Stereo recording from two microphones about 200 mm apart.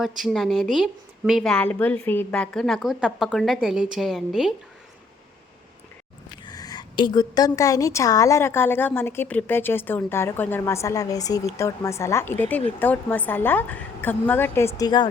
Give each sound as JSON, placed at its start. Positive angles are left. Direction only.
{"t": 0.0, "sound": "a woman's voice", "side_deg": 0}
{"t": 6.4, "sound": "a woman's voice", "side_deg": 20}